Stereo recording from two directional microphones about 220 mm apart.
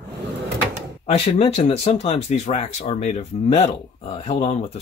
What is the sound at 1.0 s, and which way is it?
Speech, 30° left (ahead or behind).